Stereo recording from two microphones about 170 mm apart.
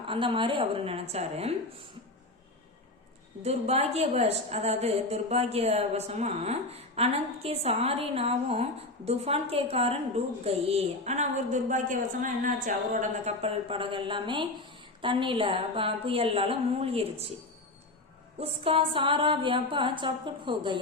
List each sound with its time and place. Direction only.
0.1 s a woman's voice: 30° right (ahead or behind)
3.4 s a woman's voice: 40° right (ahead or behind)
18.3 s a sound: 30° right (ahead or behind)